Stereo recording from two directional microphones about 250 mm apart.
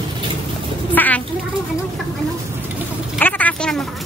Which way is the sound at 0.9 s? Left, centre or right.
Centre.